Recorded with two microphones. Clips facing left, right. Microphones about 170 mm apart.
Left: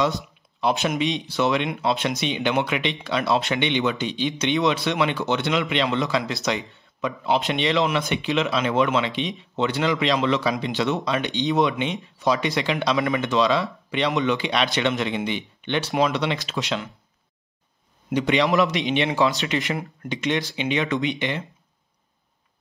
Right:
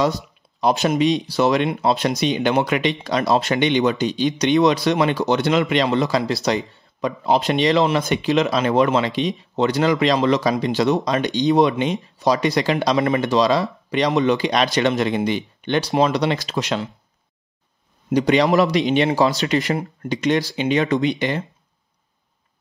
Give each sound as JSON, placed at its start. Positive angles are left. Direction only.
{"t": 0.6, "sound": "speech", "side_deg": -40}
{"t": 18.1, "sound": "speech", "side_deg": -40}